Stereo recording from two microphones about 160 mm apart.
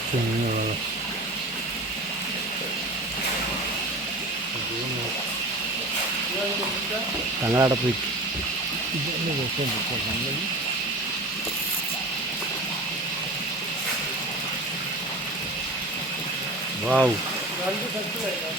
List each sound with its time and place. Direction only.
7.4 s speech: 20° right (ahead or behind)
16.8 s speech: 5° right (ahead or behind)